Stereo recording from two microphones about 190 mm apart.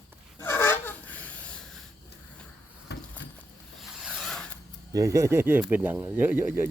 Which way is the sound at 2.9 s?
60° left (ahead or behind).